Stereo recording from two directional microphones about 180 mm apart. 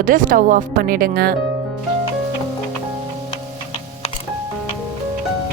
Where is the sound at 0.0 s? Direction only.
50° right (ahead or behind).